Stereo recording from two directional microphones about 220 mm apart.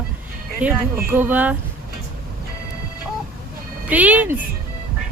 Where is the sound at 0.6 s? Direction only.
10° right (ahead or behind).